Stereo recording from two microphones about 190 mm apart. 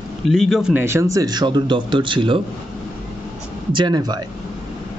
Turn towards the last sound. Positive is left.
turn(degrees=-25)  # may be behind; listen again after turning